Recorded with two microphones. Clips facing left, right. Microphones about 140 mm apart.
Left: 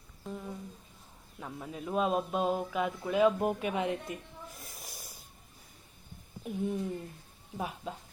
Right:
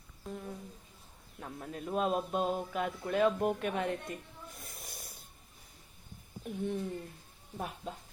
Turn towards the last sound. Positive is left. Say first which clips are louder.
# left 2 dB
turn(degrees=5)  # may be behind; listen again after turning